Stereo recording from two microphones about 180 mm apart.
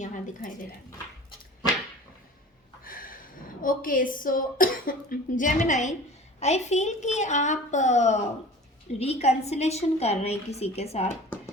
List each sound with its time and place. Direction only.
0.0 s speech: 50° left (ahead or behind)
2.8 s a sound: 50° left (ahead or behind)
3.6 s a woman's voice: 50° left (ahead or behind)